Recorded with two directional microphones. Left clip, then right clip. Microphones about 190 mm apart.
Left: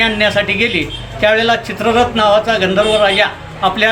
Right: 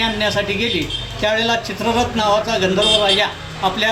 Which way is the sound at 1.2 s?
25° left (ahead or behind).